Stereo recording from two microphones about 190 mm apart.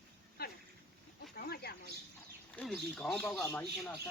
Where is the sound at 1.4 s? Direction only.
55° left (ahead or behind).